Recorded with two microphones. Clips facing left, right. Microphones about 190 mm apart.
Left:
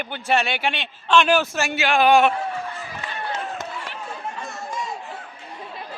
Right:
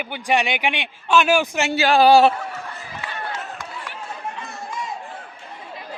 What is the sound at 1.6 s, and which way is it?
Speech, 25° right (ahead or behind).